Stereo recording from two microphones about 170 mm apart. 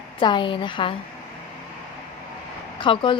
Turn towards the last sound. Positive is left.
turn(degrees=30)  # may be behind; listen again after turning